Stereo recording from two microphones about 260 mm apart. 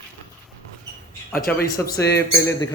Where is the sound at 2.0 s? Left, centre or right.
Left.